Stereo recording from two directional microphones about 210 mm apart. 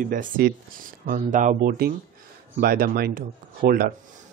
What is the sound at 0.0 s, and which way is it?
Speech, 40° right (ahead or behind).